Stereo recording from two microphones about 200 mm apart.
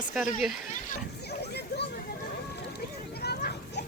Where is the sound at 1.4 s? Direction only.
55° left (ahead or behind).